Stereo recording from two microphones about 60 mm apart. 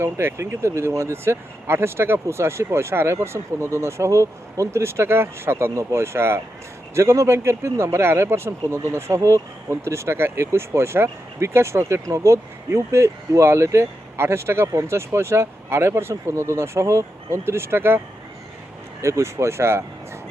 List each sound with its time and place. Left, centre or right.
0.0 s speech: right
19.0 s speech: right